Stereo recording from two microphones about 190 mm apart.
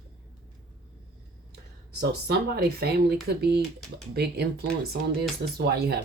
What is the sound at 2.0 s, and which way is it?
Speech, 55° right (ahead or behind).